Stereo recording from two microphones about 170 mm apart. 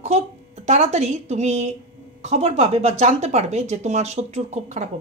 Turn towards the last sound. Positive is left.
turn(degrees=-40)  # may be behind; listen again after turning